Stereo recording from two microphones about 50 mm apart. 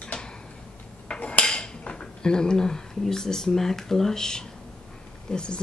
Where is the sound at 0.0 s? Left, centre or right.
Left.